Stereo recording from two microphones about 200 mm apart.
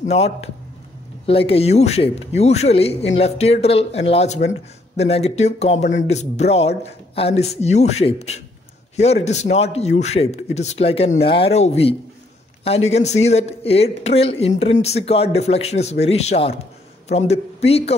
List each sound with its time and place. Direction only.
0.0 s speech: 35° left (ahead or behind)